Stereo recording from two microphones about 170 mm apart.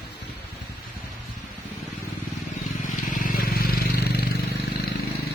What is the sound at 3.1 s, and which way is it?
Vehicle, 55° left (ahead or behind).